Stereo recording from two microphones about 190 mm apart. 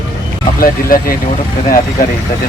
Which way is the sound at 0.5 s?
50° left (ahead or behind).